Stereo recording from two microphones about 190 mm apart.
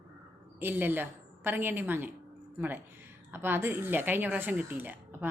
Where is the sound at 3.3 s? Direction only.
10° right (ahead or behind).